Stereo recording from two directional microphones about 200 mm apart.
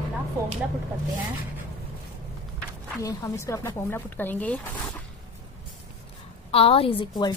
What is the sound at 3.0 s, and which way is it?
A woman's voice, 15° left (ahead or behind).